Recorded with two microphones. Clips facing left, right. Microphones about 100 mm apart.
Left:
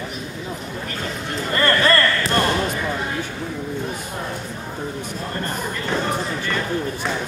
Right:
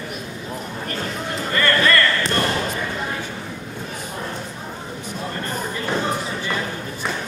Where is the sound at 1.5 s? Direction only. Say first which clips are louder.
Left 1 dB; 30° left (ahead or behind).